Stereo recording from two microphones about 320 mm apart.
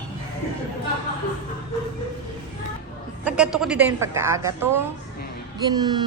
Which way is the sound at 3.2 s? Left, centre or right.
Centre.